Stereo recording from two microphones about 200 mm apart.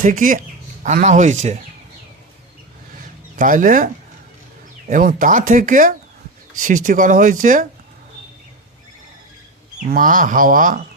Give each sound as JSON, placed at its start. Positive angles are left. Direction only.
{"t": 0.0, "sound": "speech", "side_deg": -40}
{"t": 3.3, "sound": "speech", "side_deg": -40}
{"t": 4.9, "sound": "speech", "side_deg": -40}
{"t": 9.9, "sound": "speech", "side_deg": -45}